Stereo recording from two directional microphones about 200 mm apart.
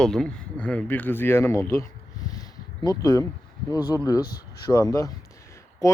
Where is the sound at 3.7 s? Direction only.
20° left (ahead or behind).